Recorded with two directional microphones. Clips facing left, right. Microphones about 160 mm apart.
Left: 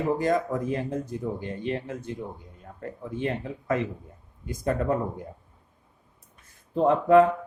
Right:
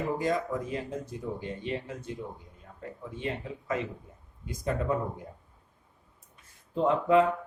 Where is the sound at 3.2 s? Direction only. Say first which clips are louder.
Left 5 dB; 55° left (ahead or behind).